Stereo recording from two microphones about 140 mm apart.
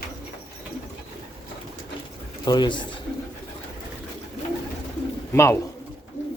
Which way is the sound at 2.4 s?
30° left (ahead or behind).